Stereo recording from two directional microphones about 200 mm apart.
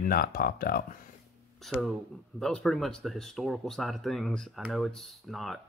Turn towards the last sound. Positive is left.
turn(degrees=0)  # may be behind; listen again after turning